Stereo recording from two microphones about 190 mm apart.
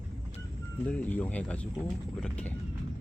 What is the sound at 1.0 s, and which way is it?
Speech, 10° left (ahead or behind).